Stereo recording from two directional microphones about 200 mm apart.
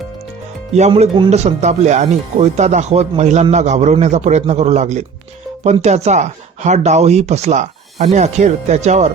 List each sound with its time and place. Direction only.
0.7 s speech: 35° right (ahead or behind)